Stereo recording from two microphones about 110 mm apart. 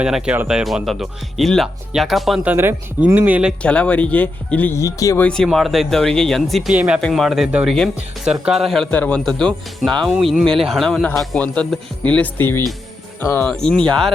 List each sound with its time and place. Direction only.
0.0 s speech: 10° right (ahead or behind)
2.4 s speech: 20° right (ahead or behind)
3.6 s speech: 10° left (ahead or behind)
4.8 s speech: 30° left (ahead or behind)
5.3 s speech: 5° left (ahead or behind)
8.9 s speech: 15° left (ahead or behind)
13.5 s speech: 5° left (ahead or behind)